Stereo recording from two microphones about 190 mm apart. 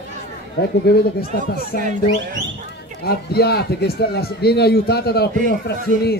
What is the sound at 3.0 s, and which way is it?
A man's voice, 55° left (ahead or behind).